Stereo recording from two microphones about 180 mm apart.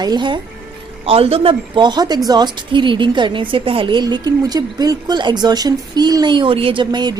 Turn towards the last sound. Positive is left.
turn(degrees=-25)  # may be behind; listen again after turning